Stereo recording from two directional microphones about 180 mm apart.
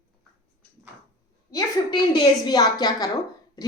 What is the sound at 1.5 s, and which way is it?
A woman's voice, 20° left (ahead or behind).